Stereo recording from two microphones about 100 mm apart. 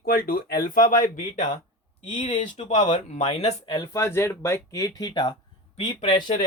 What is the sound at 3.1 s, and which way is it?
Speech, 90° left.